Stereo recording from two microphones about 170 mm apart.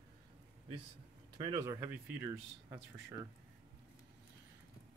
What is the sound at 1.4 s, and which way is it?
Speech, 30° right (ahead or behind).